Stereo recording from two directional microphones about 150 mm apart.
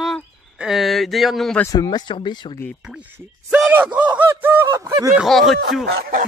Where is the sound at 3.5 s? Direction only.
10° right (ahead or behind).